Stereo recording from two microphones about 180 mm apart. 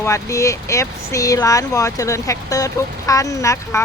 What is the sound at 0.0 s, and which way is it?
Speech, 15° left (ahead or behind).